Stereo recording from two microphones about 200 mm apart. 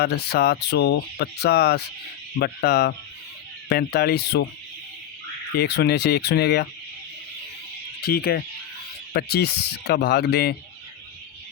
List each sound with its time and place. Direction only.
0.0 s speech: 55° left (ahead or behind)
5.5 s speech: 55° left (ahead or behind)
8.0 s speech: 50° left (ahead or behind)